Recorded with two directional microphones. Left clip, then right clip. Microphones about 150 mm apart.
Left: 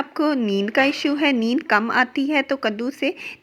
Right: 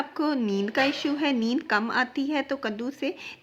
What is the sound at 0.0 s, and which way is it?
Speech, 30° left (ahead or behind).